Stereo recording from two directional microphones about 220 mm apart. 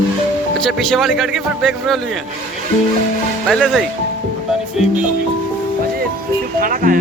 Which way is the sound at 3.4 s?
Centre (ahead or behind).